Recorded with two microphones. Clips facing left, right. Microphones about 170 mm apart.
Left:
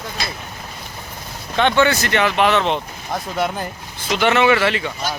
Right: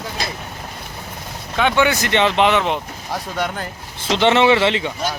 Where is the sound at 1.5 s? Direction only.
10° right (ahead or behind).